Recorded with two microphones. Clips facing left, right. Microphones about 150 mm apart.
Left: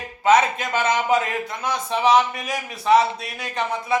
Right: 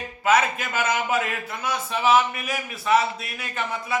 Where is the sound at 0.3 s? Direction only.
30° left (ahead or behind).